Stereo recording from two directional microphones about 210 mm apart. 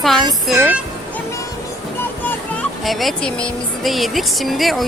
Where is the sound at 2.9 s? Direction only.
Centre (ahead or behind).